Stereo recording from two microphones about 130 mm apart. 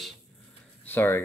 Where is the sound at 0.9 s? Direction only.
15° left (ahead or behind).